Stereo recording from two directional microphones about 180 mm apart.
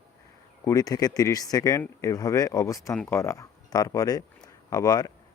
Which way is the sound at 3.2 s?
15° left (ahead or behind).